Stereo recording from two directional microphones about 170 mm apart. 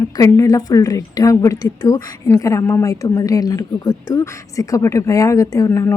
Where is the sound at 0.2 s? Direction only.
20° left (ahead or behind).